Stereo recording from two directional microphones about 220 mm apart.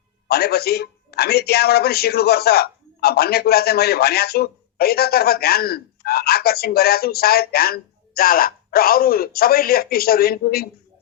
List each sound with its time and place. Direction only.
0.3 s speech: 45° left (ahead or behind)